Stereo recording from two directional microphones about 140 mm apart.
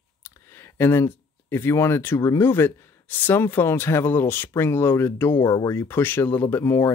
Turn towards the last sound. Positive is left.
turn(degrees=20)  # may be behind; listen again after turning